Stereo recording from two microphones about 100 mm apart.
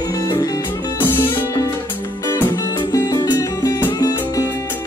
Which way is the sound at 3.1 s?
40° left (ahead or behind).